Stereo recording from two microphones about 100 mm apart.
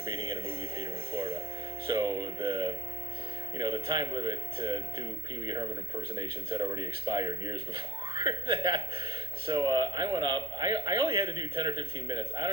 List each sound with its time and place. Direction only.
0.0 s music: 55° right (ahead or behind)
1.9 s speech: 50° right (ahead or behind)
6.7 s speech: 45° right (ahead or behind)
11.9 s speech: 45° right (ahead or behind)